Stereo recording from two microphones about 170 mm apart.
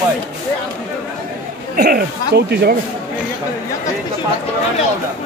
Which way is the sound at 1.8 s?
60° right (ahead or behind).